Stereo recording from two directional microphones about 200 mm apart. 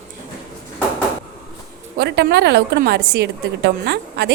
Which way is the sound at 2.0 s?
50° right (ahead or behind).